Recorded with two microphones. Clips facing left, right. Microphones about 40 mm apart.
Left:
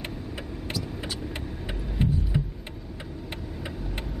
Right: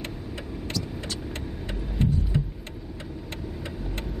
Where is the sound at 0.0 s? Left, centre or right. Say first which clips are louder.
Even; centre.